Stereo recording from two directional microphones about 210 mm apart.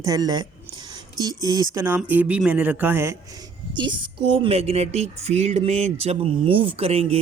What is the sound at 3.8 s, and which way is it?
Speech, 25° right (ahead or behind).